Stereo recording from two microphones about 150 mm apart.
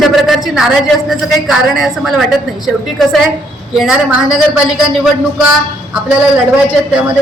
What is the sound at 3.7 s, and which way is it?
A woman's voice, 5° right (ahead or behind).